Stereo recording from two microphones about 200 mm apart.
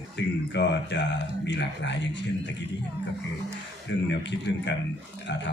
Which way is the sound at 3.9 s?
60° left (ahead or behind).